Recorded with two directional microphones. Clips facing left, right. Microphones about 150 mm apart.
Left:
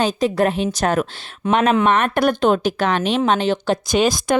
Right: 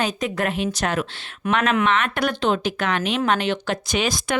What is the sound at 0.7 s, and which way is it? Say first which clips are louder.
Speech: left 5 dB; 45° left (ahead or behind).